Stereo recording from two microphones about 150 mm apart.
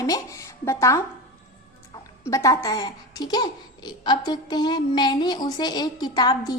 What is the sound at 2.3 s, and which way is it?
Speech, 20° left (ahead or behind).